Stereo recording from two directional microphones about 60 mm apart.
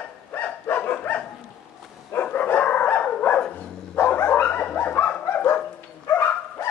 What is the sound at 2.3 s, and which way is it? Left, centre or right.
Dog, left.